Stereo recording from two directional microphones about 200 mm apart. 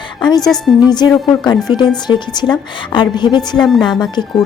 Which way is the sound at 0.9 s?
20° left (ahead or behind).